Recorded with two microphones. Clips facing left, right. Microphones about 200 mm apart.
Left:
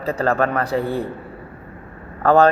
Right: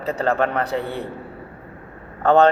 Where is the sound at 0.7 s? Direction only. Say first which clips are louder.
Left 4 dB; 35° left (ahead or behind).